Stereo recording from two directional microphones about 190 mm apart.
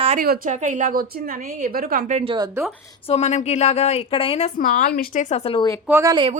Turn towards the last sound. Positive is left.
turn(degrees=-15)  # may be behind; listen again after turning